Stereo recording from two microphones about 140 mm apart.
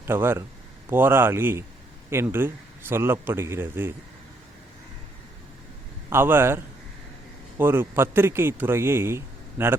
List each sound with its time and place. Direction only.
0.0 s a man's voice: 15° right (ahead or behind)
6.1 s a man's voice: 15° right (ahead or behind)
7.6 s a man's voice: 15° right (ahead or behind)